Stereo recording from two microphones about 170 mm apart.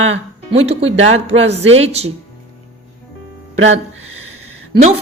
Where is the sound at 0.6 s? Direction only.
35° right (ahead or behind).